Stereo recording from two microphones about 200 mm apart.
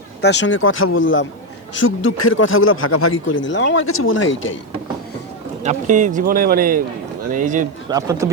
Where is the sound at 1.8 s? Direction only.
85° left.